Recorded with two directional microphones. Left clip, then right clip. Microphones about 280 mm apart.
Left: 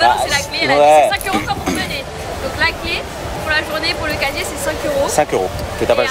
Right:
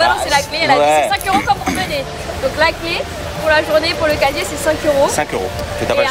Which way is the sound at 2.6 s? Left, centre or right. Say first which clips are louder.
Right 2 dB; centre.